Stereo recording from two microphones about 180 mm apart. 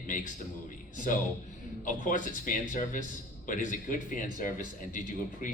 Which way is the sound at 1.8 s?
45° left (ahead or behind).